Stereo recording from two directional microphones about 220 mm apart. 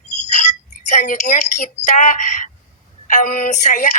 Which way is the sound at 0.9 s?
35° left (ahead or behind).